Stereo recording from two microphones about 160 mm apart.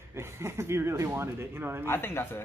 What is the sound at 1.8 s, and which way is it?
Speech, 15° left (ahead or behind).